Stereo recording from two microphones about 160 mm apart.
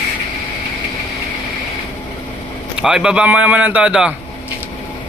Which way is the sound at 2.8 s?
5° right (ahead or behind).